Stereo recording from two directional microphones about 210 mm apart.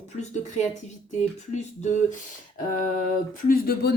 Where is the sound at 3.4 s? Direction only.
45° left (ahead or behind).